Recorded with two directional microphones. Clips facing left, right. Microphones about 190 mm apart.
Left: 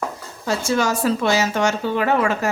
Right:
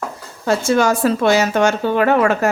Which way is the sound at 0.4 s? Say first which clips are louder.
Right 5 dB; 55° right (ahead or behind).